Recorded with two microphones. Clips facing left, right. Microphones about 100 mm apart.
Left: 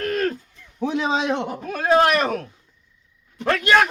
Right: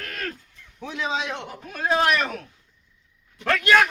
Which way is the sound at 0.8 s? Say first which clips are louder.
Left 6 dB; 25° left (ahead or behind).